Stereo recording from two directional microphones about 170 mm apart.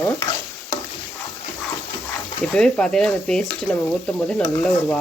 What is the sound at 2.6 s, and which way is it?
Speech, 5° left (ahead or behind).